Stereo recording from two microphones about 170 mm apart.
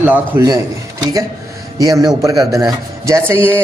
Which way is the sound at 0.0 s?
10° right (ahead or behind).